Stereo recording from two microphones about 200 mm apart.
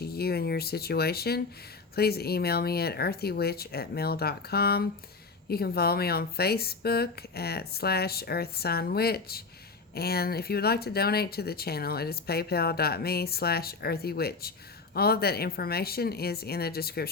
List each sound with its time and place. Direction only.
0.0 s speech: 50° left (ahead or behind)